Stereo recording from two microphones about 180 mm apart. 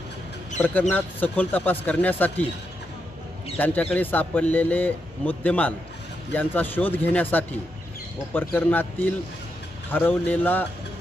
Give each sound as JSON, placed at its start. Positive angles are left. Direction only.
{"t": 0.6, "sound": "speech", "side_deg": 10}
{"t": 3.5, "sound": "speech", "side_deg": 10}